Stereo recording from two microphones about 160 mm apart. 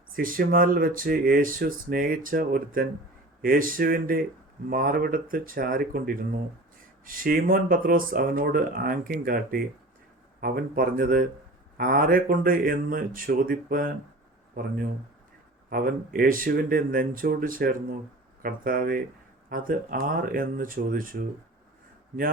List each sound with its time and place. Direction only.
0.1 s speech: 60° right (ahead or behind)
15.7 s speech: 65° right (ahead or behind)